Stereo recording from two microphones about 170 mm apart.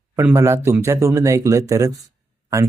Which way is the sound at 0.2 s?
15° right (ahead or behind).